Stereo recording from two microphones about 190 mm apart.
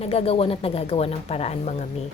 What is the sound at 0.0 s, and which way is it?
Speech, 30° left (ahead or behind).